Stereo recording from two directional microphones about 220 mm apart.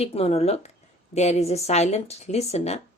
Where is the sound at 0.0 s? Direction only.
25° left (ahead or behind).